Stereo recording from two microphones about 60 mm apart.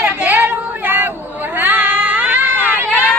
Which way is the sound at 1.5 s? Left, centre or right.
Right.